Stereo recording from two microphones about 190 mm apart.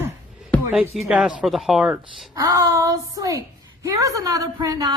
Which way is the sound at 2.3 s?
20° right (ahead or behind).